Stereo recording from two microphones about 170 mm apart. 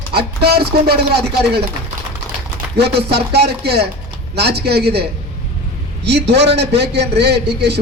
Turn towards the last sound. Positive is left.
turn(degrees=-80)